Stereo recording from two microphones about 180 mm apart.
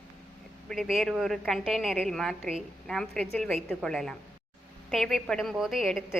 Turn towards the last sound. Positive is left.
turn(degrees=0)  # may be behind; listen again after turning